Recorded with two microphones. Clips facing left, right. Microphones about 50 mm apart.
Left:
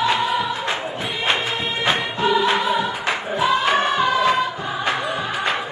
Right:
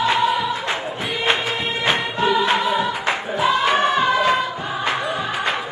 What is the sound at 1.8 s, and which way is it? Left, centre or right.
Music, right.